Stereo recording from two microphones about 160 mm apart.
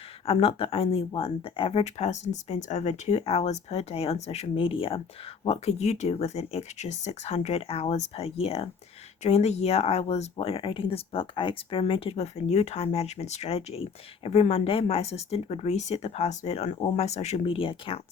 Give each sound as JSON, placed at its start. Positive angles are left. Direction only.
{"t": 0.3, "sound": "speech", "side_deg": 35}